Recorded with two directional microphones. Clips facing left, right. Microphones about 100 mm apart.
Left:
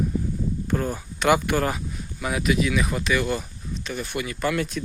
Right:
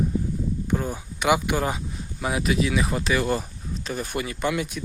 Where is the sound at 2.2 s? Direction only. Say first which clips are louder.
Left 1 dB; 30° right (ahead or behind).